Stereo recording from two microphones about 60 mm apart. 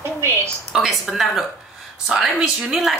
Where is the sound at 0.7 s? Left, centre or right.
Centre.